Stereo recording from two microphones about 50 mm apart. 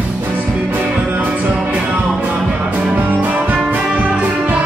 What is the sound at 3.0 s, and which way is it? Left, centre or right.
Music, right.